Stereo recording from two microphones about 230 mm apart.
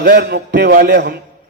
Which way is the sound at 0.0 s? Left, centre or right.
Right.